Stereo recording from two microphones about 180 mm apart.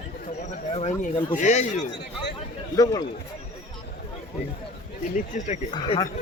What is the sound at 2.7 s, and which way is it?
Speech, 20° left (ahead or behind).